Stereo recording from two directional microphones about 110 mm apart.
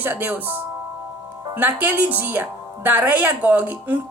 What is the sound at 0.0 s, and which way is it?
A woman's voice, 15° right (ahead or behind).